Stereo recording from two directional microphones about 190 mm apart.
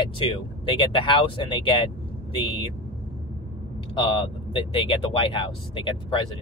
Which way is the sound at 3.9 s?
30° left (ahead or behind).